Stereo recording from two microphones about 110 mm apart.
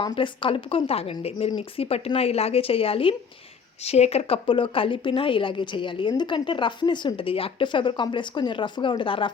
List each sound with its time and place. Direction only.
0.0 s a woman's voice: 50° left (ahead or behind)
3.8 s a woman's voice: 75° left (ahead or behind); by 9.3 s 50° left (ahead or behind)